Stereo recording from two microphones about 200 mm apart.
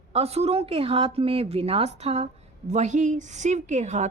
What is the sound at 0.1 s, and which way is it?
A woman's voice, 30° right (ahead or behind).